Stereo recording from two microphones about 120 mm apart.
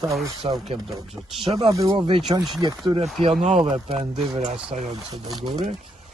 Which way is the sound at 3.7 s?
55° right (ahead or behind).